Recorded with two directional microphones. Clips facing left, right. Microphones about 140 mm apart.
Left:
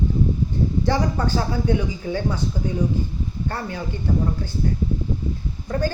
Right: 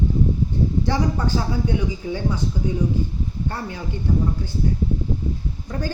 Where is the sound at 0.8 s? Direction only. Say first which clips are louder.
Left 1 dB; 20° right (ahead or behind).